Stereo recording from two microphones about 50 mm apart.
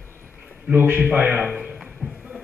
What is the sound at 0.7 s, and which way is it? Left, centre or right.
Speech, right.